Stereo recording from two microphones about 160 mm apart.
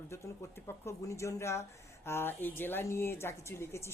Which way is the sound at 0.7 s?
20° left (ahead or behind).